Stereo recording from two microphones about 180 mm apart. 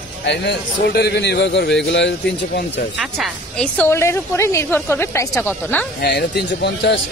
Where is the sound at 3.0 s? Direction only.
Centre (ahead or behind).